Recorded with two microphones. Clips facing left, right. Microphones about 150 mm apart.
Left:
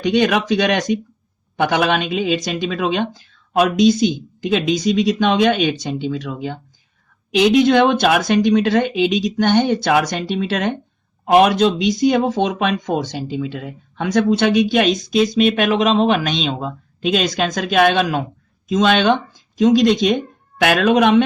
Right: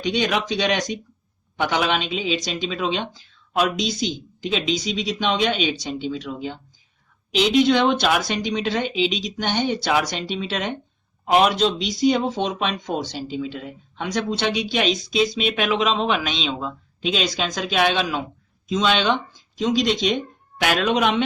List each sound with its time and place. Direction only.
0.0 s speech: 55° left (ahead or behind)